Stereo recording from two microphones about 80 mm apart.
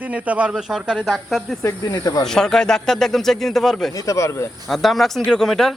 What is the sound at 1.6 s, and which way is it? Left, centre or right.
Snake, left.